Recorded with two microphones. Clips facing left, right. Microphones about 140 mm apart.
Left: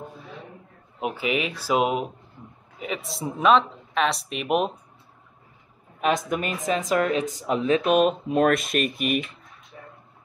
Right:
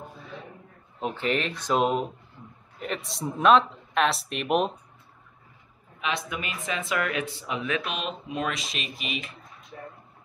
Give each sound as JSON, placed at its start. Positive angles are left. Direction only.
{"t": 1.0, "sound": "speech", "side_deg": 10}
{"t": 5.9, "sound": "speech", "side_deg": 45}
{"t": 7.9, "sound": "speech", "side_deg": 50}